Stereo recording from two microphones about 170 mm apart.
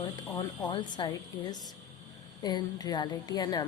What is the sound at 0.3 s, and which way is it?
A woman's voice, 25° left (ahead or behind).